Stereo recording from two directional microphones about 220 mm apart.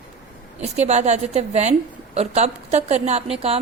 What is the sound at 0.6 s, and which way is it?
A woman's voice, 30° right (ahead or behind).